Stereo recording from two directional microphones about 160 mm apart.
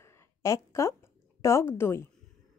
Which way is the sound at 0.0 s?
15° left (ahead or behind).